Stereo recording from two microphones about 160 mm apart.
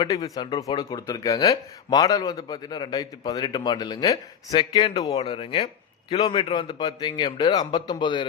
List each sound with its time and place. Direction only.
0.0 s speech: 25° left (ahead or behind)